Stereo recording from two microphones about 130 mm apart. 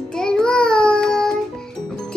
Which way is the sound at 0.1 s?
5° left (ahead or behind).